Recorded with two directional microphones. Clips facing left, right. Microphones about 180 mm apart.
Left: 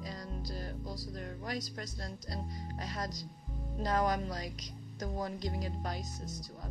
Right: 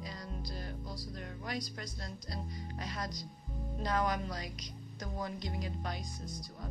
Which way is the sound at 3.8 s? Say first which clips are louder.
Left 2 dB; 40° left (ahead or behind).